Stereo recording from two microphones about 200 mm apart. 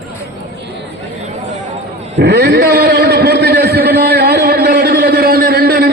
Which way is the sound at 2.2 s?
60° right (ahead or behind).